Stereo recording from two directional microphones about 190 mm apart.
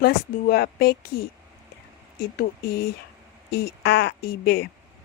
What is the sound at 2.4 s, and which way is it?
A woman's voice, 55° left (ahead or behind).